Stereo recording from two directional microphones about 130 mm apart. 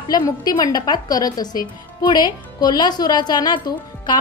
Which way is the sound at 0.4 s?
30° left (ahead or behind).